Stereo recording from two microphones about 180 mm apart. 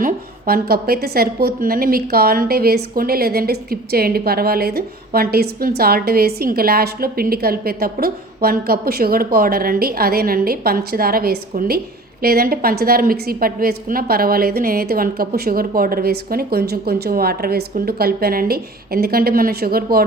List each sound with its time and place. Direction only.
0.0 s a woman's voice: 55° right (ahead or behind)